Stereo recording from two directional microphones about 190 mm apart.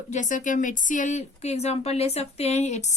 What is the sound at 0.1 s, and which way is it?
Speech, 40° left (ahead or behind).